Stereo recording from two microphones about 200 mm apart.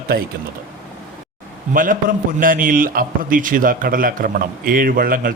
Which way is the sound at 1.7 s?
45° right (ahead or behind).